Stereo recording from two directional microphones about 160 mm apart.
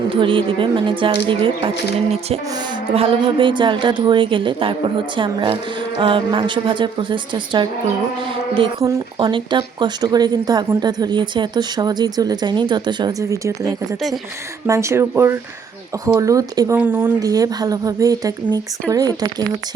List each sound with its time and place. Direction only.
0.1 s a woman's voice: 30° right (ahead or behind)
8.8 s speech: 20° right (ahead or behind)
9.2 s speech: 30° right (ahead or behind)